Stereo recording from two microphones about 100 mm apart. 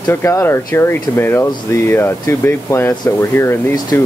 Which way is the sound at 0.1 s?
25° left (ahead or behind).